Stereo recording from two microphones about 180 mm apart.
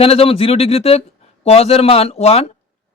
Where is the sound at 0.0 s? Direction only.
30° left (ahead or behind).